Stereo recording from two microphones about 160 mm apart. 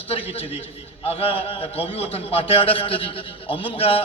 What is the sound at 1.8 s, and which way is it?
A man's voice, 35° left (ahead or behind).